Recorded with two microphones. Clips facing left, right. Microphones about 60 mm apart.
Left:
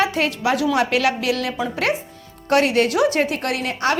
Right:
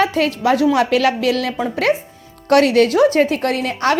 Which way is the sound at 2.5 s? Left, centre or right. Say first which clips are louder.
Right 5 dB; right.